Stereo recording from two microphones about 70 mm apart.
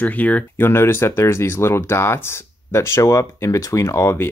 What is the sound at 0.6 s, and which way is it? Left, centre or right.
Speech, left.